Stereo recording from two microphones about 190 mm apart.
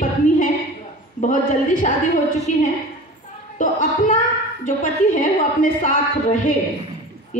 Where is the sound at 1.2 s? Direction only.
40° left (ahead or behind).